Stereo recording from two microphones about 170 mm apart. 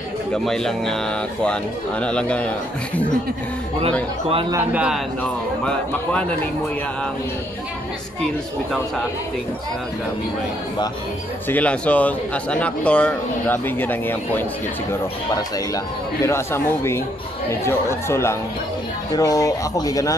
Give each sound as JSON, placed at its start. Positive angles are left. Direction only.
{"t": 0.3, "sound": "a man's voice", "side_deg": 5}
{"t": 4.5, "sound": "a man's voice", "side_deg": -10}
{"t": 5.2, "sound": "a man's voice", "side_deg": 5}
{"t": 11.4, "sound": "speech", "side_deg": 10}
{"t": 15.7, "sound": "speech", "side_deg": 15}